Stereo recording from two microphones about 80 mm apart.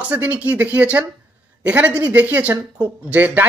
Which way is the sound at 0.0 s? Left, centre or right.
Centre.